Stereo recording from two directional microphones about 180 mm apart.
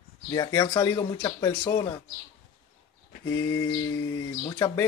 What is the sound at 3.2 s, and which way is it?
Speech, 20° left (ahead or behind).